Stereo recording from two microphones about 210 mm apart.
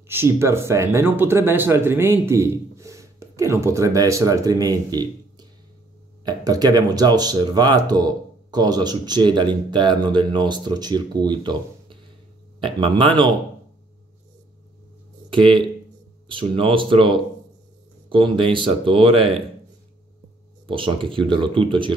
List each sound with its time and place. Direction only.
0.1 s speech: 10° right (ahead or behind)
15.2 s speech: 25° right (ahead or behind)
20.6 s speech: 25° right (ahead or behind)